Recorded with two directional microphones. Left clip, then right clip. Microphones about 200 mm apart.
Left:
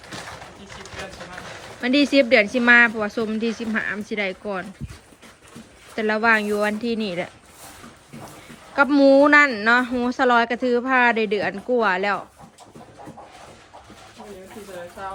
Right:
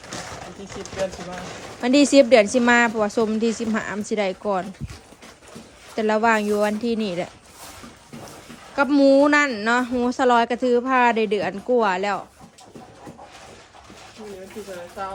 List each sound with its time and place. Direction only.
1.8 s a woman's voice: 20° right (ahead or behind)
6.0 s a woman's voice: 15° right (ahead or behind)
8.7 s a woman's voice: 10° right (ahead or behind)